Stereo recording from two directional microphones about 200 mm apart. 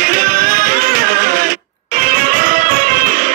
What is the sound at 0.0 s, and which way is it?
Music, 45° right (ahead or behind).